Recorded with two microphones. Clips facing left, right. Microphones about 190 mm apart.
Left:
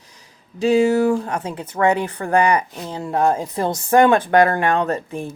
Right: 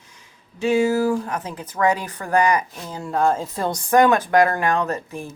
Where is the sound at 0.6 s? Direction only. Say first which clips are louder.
Left 3 dB; 35° left (ahead or behind).